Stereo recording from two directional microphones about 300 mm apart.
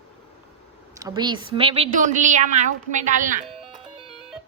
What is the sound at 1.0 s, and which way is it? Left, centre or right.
A woman's voice, centre.